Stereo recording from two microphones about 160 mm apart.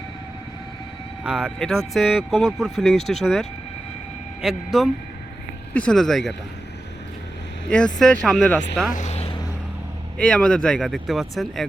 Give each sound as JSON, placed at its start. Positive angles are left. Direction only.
{"t": 1.2, "sound": "speech", "side_deg": -5}
{"t": 7.9, "sound": "speech", "side_deg": 5}
{"t": 8.9, "sound": "vehicle", "side_deg": 45}
{"t": 10.2, "sound": "speech", "side_deg": 5}